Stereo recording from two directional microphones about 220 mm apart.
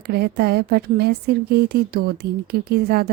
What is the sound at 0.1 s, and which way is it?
A woman's voice, 45° right (ahead or behind).